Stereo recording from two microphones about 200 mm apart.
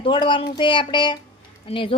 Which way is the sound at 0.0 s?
25° left (ahead or behind).